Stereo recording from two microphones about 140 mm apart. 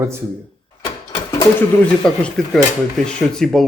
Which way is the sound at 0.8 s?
30° left (ahead or behind).